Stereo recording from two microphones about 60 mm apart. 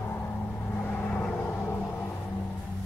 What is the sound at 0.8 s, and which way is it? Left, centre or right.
Vehicle, left.